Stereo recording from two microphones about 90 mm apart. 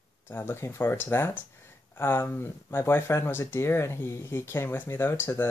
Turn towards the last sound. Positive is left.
turn(degrees=25)  # may be behind; listen again after turning